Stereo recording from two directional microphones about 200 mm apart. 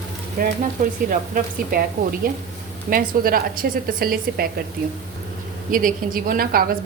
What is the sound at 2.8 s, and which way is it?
A woman's voice, 45° right (ahead or behind).